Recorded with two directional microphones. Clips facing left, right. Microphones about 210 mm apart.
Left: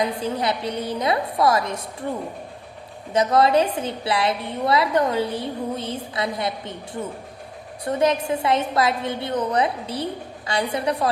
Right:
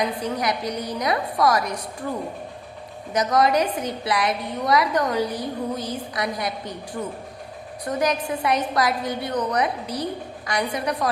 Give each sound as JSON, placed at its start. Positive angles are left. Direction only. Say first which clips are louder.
{"t": 0.0, "sound": "a woman's voice", "louder": "left 1 dB", "side_deg": 30}
{"t": 3.1, "sound": "a woman's voice", "louder": "left 2 dB", "side_deg": 30}
{"t": 7.9, "sound": "a woman's voice", "louder": "left 3 dB", "side_deg": 25}